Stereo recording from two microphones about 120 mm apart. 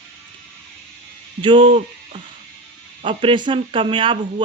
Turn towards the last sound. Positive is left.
turn(degrees=-45)  # may be behind; listen again after turning